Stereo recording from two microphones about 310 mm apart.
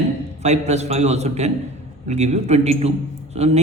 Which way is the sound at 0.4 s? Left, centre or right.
Right.